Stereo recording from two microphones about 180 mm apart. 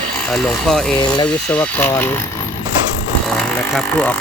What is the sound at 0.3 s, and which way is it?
Speech, centre (ahead or behind).